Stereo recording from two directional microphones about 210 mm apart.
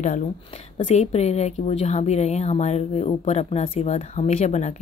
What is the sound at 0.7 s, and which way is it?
A woman's voice, 30° left (ahead or behind).